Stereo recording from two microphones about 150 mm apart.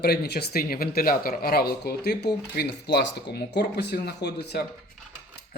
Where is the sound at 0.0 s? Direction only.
90° left.